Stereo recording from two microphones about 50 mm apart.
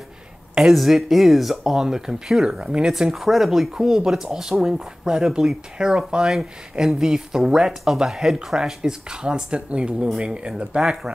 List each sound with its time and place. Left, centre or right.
0.6 s speech: centre